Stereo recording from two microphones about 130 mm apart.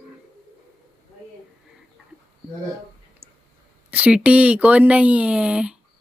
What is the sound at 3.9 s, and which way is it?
Speech, 10° right (ahead or behind).